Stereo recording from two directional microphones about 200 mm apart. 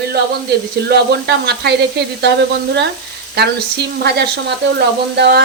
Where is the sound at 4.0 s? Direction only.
55° right (ahead or behind).